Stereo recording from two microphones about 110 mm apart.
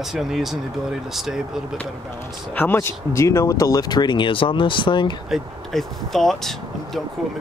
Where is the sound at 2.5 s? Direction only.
20° left (ahead or behind); by 5.2 s 45° left (ahead or behind).